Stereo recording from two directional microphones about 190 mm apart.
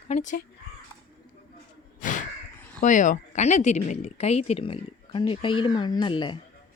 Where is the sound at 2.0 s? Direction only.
45° left (ahead or behind).